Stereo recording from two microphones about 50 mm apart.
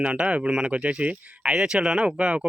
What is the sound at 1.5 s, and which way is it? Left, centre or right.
Speech, centre.